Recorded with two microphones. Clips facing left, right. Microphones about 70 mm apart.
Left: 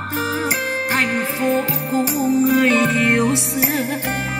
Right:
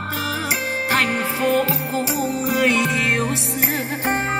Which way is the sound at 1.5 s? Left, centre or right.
Left.